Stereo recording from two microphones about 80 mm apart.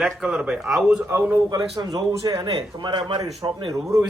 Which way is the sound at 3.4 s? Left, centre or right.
Right.